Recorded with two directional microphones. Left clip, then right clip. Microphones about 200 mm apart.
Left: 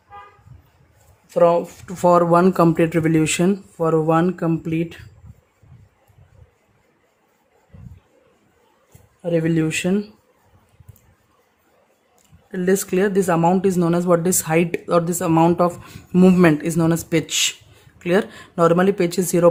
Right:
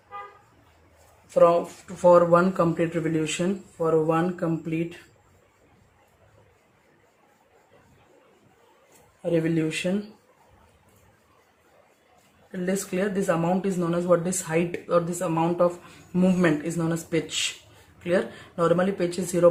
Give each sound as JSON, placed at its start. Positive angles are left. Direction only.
{"t": 1.3, "sound": "speech", "side_deg": 40}
{"t": 2.0, "sound": "speech", "side_deg": 60}
{"t": 9.3, "sound": "speech", "side_deg": 50}
{"t": 12.5, "sound": "speech", "side_deg": 50}